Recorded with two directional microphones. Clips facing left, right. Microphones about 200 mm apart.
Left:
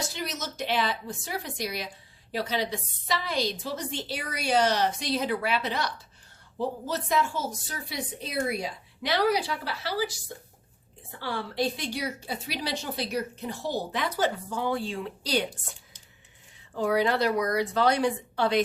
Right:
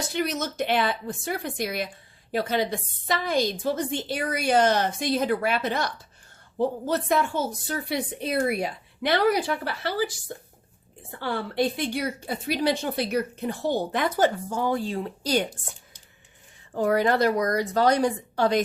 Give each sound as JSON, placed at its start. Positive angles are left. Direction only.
{"t": 0.1, "sound": "a woman's voice", "side_deg": -60}
{"t": 16.7, "sound": "a woman's voice", "side_deg": -50}